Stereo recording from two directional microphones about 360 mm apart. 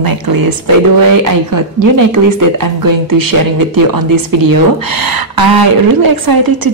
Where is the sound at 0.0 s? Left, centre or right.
Right.